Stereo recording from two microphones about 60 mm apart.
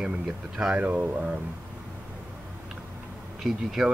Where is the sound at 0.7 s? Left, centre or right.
Right.